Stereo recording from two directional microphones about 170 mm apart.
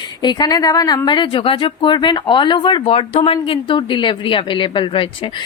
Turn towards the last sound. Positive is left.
turn(degrees=30)  # may be behind; listen again after turning